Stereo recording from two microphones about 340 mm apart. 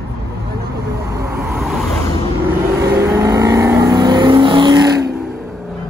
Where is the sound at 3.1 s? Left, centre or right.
Centre.